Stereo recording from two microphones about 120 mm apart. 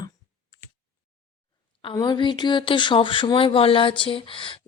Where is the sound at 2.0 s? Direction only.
40° left (ahead or behind).